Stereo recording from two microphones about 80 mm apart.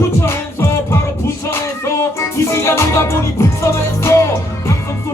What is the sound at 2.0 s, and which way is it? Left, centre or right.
Music, left.